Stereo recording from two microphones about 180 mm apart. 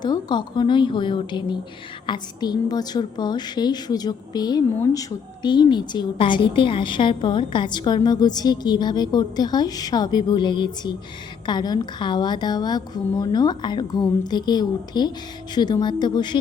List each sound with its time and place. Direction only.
0.0 s a woman's voice: 25° left (ahead or behind)